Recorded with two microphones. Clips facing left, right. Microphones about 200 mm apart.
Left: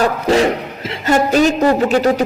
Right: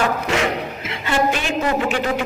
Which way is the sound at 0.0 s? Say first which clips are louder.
Left 6 dB; 35° left (ahead or behind).